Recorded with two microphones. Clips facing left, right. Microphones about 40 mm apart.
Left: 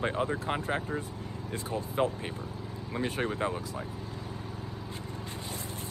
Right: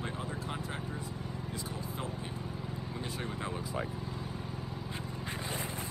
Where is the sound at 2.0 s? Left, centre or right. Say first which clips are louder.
Left 9 dB; left.